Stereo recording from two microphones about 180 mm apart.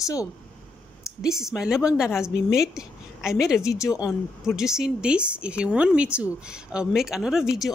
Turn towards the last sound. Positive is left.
turn(degrees=0)  # may be behind; listen again after turning